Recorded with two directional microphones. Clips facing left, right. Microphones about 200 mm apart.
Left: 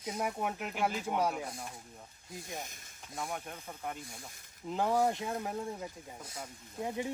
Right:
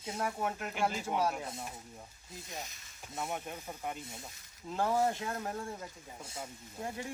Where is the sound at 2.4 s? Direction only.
50° left (ahead or behind).